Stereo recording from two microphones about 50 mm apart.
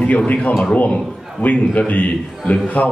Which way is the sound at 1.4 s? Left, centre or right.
Left.